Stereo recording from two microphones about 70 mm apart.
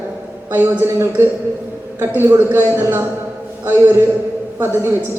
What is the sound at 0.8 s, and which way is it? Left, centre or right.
A man's voice, right.